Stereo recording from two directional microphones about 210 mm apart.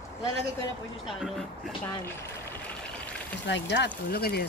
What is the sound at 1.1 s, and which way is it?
Speech, centre (ahead or behind).